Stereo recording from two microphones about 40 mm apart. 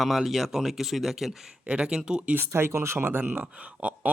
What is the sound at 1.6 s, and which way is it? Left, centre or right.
Speech, right.